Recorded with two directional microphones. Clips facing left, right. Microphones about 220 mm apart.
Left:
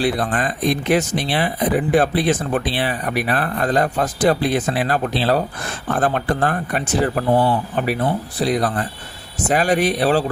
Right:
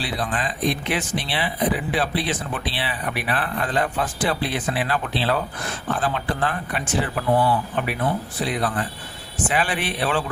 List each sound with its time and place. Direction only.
0.0 s speech: 50° left (ahead or behind)